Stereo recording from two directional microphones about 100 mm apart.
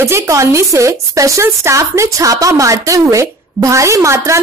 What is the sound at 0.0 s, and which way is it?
Speech, 30° right (ahead or behind).